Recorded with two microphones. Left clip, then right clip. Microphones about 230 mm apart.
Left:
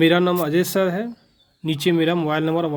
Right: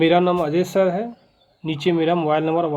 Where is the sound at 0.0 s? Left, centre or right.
Left.